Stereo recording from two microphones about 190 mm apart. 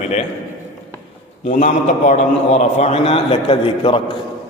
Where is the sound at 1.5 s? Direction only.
40° left (ahead or behind).